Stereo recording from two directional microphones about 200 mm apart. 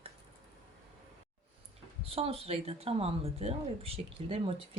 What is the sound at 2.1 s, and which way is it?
Speech, 30° right (ahead or behind).